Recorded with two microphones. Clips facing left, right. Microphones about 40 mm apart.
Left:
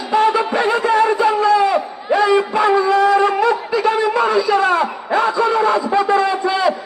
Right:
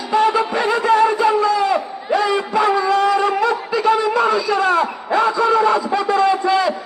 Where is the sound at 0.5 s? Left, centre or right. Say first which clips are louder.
Left 2 dB; left.